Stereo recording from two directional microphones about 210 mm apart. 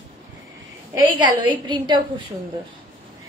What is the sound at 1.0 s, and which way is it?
Speech, 20° right (ahead or behind).